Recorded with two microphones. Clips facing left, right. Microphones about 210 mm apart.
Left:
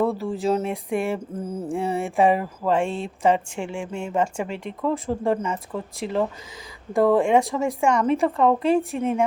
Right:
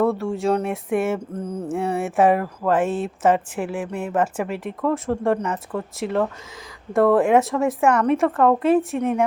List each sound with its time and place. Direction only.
0.0 s mantra: centre (ahead or behind)